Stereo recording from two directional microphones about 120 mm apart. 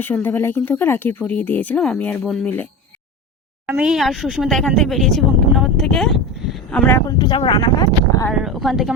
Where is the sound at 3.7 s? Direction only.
5° right (ahead or behind).